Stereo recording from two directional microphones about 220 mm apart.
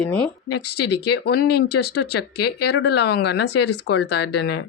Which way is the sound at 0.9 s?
50° left (ahead or behind).